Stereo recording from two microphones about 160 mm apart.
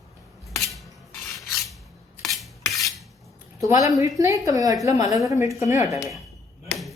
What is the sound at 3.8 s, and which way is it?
A woman's voice, 20° right (ahead or behind).